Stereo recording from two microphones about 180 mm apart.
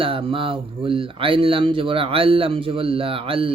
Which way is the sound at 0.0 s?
30° right (ahead or behind).